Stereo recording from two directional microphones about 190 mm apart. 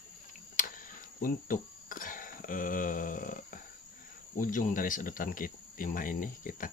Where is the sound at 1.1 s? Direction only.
45° left (ahead or behind).